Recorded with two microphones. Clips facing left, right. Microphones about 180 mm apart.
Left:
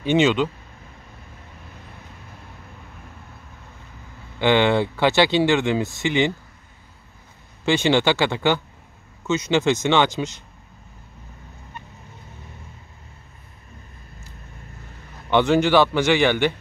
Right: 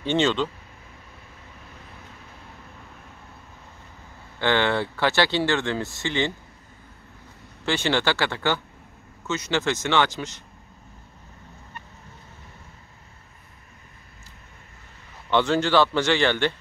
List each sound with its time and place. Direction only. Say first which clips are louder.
0.0 s speech: left 4 dB; 15° left (ahead or behind)
4.4 s speech: left 5 dB; 15° left (ahead or behind)
7.6 s speech: left 5 dB; 15° left (ahead or behind)
15.2 s speech: left 4 dB; 15° left (ahead or behind)